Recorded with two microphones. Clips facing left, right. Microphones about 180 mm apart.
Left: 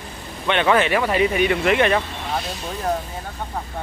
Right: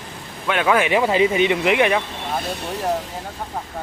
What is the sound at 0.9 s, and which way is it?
Speech, 20° right (ahead or behind).